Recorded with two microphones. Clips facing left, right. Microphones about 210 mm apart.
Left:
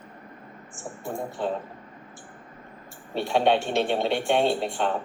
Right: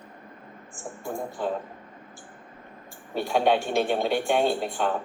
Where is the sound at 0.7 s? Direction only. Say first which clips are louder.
Even; centre (ahead or behind).